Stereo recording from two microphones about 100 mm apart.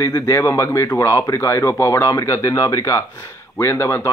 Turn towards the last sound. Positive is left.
turn(degrees=25)  # may be behind; listen again after turning